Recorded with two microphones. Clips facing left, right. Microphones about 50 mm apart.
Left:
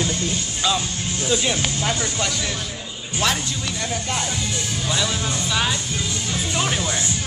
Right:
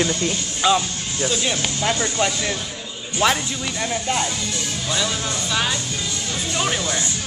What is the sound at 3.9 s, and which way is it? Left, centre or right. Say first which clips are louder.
Speech: right 3 dB; centre.